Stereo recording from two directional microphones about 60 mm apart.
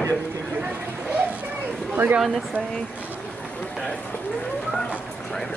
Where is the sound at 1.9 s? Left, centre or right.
Right.